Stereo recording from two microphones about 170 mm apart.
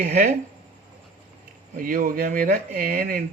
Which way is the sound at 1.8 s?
55° right (ahead or behind).